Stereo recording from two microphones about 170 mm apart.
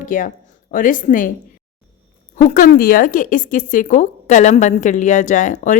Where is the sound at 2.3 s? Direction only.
50° left (ahead or behind).